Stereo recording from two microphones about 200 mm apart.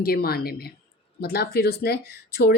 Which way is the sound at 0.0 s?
50° left (ahead or behind).